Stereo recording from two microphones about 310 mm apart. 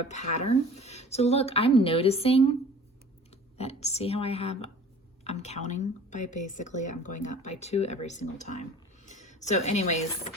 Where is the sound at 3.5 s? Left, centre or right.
Centre.